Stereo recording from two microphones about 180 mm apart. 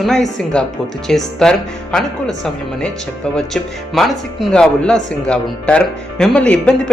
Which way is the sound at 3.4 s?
Centre (ahead or behind).